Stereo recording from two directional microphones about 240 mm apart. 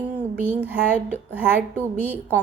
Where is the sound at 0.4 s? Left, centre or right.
Centre.